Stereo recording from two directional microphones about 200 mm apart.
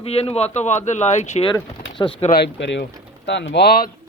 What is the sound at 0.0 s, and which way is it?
Speech, 30° left (ahead or behind).